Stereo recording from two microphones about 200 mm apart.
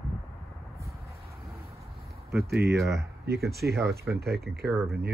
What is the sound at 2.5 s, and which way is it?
Speech, 55° right (ahead or behind).